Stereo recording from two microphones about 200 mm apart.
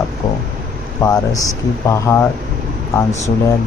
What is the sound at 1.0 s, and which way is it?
Speech, 15° left (ahead or behind).